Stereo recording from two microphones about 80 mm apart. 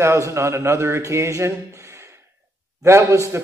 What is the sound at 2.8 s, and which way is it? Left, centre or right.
Speech, right.